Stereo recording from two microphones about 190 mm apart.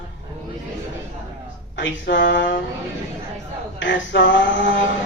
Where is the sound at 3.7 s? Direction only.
70° left (ahead or behind).